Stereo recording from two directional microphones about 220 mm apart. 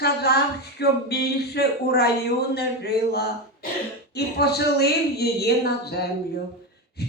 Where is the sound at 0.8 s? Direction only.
45° left (ahead or behind).